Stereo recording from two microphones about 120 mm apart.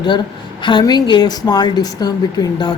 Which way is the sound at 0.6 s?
40° left (ahead or behind).